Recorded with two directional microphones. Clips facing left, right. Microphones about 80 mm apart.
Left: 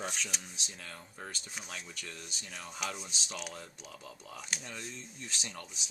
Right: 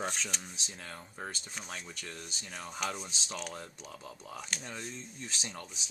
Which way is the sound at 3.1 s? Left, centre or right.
Right.